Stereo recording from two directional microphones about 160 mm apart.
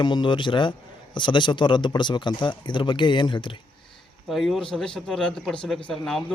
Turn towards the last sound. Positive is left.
turn(degrees=5)  # may be behind; listen again after turning